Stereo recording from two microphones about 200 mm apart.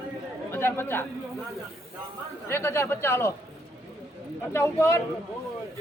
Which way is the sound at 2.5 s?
10° left (ahead or behind).